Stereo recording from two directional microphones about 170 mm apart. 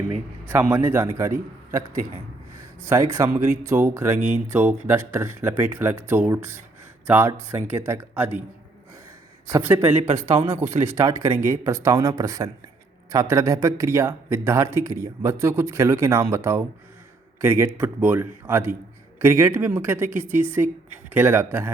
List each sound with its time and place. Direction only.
0.4 s a man's voice: 10° right (ahead or behind)
2.8 s a man's voice: 15° right (ahead or behind)
9.5 s a man's voice: 15° right (ahead or behind)
10.0 s a man's voice: 35° right (ahead or behind)
10.5 s a man's voice: 15° right (ahead or behind)